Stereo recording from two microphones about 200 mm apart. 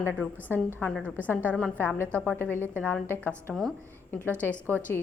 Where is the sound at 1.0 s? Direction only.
10° right (ahead or behind).